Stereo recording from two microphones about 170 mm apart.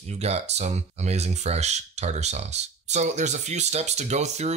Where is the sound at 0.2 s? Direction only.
40° right (ahead or behind).